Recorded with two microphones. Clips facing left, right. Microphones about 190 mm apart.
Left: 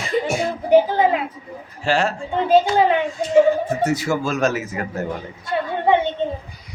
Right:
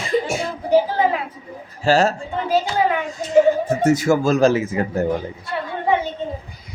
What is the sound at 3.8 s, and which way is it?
Speech, 45° right (ahead or behind).